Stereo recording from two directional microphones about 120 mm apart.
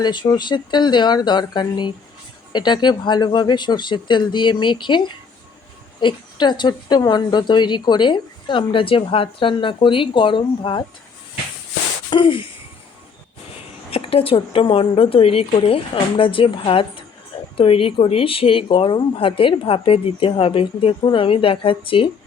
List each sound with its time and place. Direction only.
0.0 s a woman's voice: 40° left (ahead or behind)
12.1 s a woman's voice: 45° left (ahead or behind)
13.9 s a woman's voice: 55° left (ahead or behind)